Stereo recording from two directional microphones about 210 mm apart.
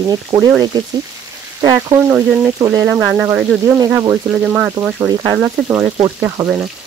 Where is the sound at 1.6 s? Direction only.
15° right (ahead or behind).